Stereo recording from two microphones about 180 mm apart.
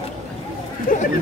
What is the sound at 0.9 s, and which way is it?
Speech, 50° left (ahead or behind).